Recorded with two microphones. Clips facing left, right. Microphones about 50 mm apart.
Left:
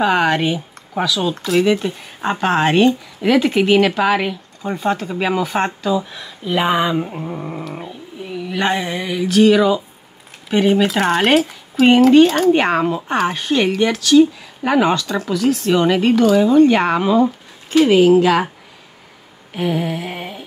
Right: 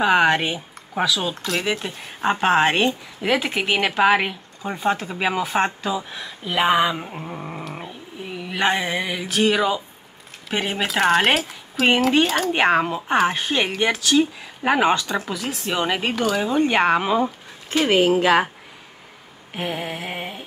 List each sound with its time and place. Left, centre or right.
0.0 s speech: centre
5.8 s a sound: centre
10.5 s speech: centre
17.6 s speech: right
19.5 s speech: centre